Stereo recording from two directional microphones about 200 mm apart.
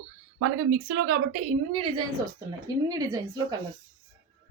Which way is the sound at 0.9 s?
60° right (ahead or behind).